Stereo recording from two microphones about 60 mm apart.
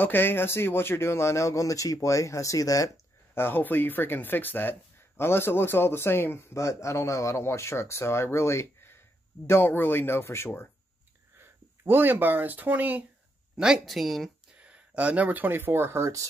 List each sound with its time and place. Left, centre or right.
0.0 s speech: left
3.3 s speech: left
11.3 s speech: right
13.8 s speech: centre
14.6 s speech: right